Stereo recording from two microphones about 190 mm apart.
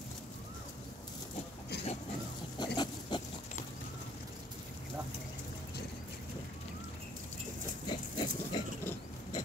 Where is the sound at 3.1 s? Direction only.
25° left (ahead or behind).